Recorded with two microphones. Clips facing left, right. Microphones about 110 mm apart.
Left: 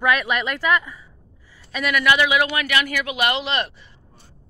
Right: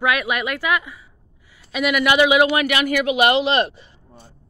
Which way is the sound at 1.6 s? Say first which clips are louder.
Right 3 dB; 10° right (ahead or behind).